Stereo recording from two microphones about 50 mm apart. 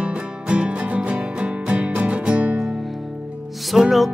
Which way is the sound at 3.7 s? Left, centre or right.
Centre.